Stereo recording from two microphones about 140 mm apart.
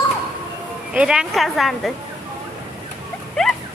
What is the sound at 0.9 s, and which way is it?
A woman's voice, 5° right (ahead or behind).